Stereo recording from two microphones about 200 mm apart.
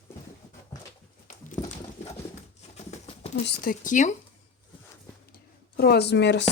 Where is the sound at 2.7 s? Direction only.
35° left (ahead or behind).